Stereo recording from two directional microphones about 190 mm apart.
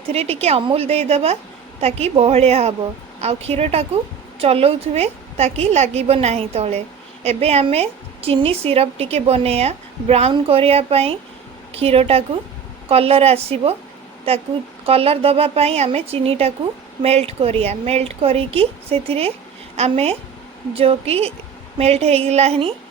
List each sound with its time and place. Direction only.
0.1 s a woman's voice: 35° right (ahead or behind)
14.8 s a woman's voice: 30° right (ahead or behind)